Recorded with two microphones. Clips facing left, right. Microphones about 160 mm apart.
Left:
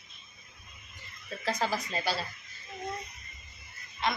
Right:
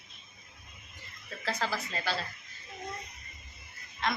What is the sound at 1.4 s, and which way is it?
Speech, 15° left (ahead or behind).